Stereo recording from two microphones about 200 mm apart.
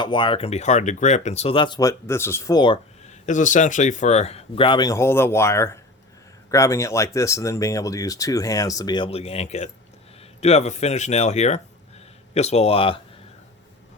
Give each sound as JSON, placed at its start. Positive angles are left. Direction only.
{"t": 0.0, "sound": "speech", "side_deg": 25}
{"t": 3.1, "sound": "speech", "side_deg": 40}